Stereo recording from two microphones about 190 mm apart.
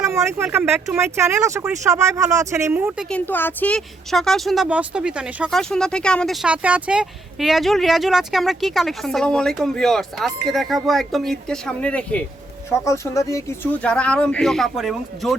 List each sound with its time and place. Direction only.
0.1 s speech: 15° right (ahead or behind)
3.1 s speech: 10° left (ahead or behind)